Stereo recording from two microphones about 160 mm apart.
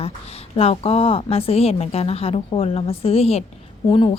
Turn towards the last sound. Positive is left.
turn(degrees=30)  # may be behind; listen again after turning